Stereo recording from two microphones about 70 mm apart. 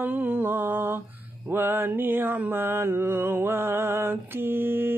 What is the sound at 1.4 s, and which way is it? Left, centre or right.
Mantra, right.